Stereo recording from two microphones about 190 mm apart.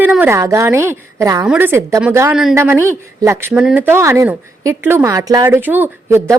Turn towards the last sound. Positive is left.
turn(degrees=-15)  # may be behind; listen again after turning